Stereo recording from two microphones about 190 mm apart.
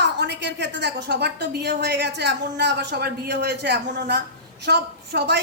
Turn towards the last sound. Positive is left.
turn(degrees=-60)  # may be behind; listen again after turning